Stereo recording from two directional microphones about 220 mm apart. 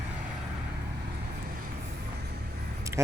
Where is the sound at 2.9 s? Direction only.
10° right (ahead or behind).